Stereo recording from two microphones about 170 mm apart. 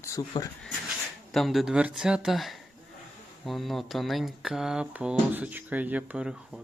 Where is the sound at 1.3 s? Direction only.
Centre (ahead or behind).